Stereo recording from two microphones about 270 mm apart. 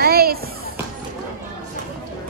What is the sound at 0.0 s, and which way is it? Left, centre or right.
Children playing, right.